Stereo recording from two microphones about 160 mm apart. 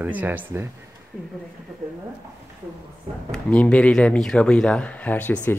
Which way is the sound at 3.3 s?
10° left (ahead or behind).